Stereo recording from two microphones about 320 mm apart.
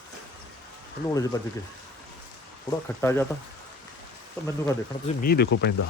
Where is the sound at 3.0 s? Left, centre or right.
Centre.